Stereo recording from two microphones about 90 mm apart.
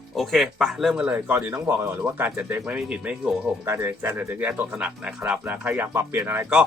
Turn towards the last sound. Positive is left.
turn(degrees=-25)  # may be behind; listen again after turning